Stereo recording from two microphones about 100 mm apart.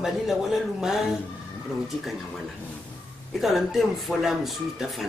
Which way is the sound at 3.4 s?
Centre (ahead or behind).